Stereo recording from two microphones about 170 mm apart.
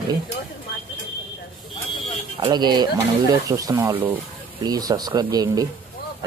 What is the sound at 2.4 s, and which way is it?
Speech, 25° right (ahead or behind).